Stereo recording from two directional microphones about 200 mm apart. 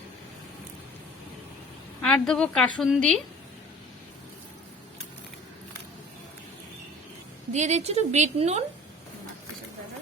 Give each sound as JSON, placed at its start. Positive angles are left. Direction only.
{"t": 2.0, "sound": "a woman's voice", "side_deg": 5}
{"t": 7.5, "sound": "a woman's voice", "side_deg": -35}